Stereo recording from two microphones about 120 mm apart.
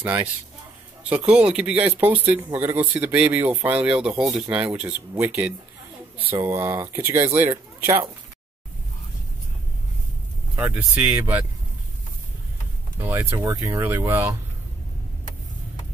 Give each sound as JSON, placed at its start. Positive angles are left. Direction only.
{"t": 0.0, "sound": "speech", "side_deg": -15}
{"t": 1.3, "sound": "speech", "side_deg": -10}
{"t": 5.1, "sound": "speech", "side_deg": -25}
{"t": 10.7, "sound": "speech", "side_deg": -10}
{"t": 12.9, "sound": "speech", "side_deg": -15}